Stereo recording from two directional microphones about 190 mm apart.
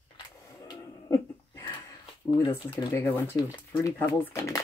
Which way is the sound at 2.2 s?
20° left (ahead or behind).